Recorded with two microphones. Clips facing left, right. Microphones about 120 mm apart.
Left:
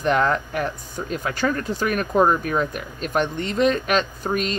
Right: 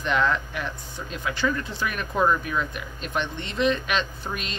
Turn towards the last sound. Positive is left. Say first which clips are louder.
# left 9 dB
turn(degrees=45)  # may be behind; listen again after turning